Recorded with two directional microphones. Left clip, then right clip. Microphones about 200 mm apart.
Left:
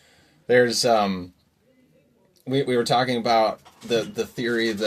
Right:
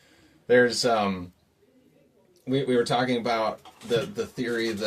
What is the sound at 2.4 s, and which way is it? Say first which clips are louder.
Speech: left 2 dB; 25° left (ahead or behind).